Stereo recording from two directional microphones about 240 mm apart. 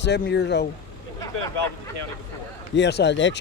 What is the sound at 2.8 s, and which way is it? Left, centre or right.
Speech, left.